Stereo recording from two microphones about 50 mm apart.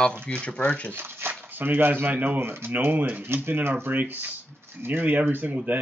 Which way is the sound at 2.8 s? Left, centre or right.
Right.